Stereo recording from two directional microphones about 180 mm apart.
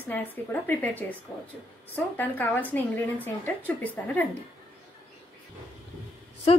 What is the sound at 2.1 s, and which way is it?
Speech, 10° left (ahead or behind).